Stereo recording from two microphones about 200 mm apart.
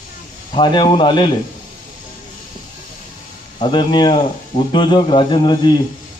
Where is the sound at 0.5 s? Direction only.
25° left (ahead or behind).